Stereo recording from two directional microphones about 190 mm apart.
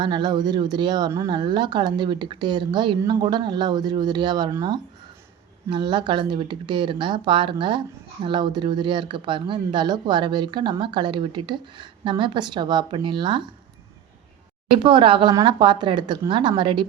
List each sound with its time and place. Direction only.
0.0 s speech: 25° right (ahead or behind)
14.7 s speech: 25° right (ahead or behind)